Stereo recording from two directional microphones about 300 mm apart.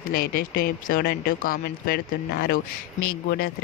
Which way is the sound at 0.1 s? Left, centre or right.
Left.